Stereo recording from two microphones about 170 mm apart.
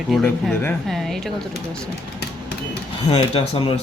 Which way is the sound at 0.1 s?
Centre (ahead or behind).